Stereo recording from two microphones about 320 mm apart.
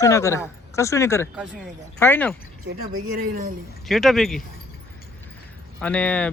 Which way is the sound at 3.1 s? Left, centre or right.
Right.